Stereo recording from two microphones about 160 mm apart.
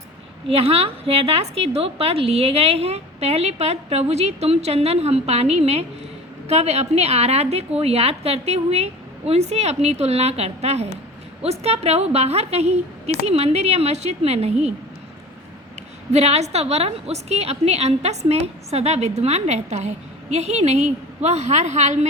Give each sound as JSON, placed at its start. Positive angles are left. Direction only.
{"t": 0.4, "sound": "a woman's voice", "side_deg": -40}
{"t": 16.1, "sound": "a woman's voice", "side_deg": -40}